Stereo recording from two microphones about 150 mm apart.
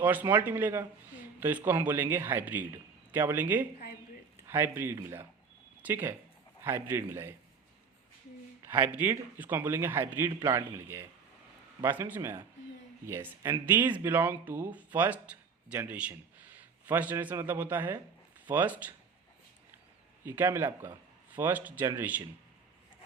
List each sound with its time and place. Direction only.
0.0 s speech: 10° right (ahead or behind)
8.6 s speech: 15° right (ahead or behind)
20.2 s speech: 15° right (ahead or behind)